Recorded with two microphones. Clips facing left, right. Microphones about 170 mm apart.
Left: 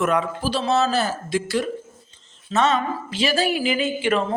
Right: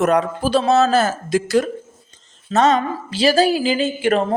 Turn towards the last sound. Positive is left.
turn(degrees=-40)  # may be behind; listen again after turning